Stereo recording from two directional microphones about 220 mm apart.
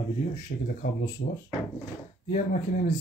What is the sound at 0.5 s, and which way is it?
Speech, 40° left (ahead or behind).